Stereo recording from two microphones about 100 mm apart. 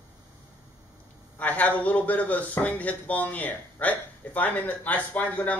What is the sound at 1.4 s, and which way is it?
A man's voice, 15° left (ahead or behind).